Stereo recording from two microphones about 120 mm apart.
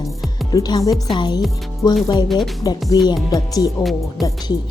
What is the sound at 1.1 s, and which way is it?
Speech, 35° left (ahead or behind).